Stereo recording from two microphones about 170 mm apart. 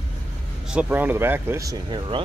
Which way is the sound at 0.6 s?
5° right (ahead or behind).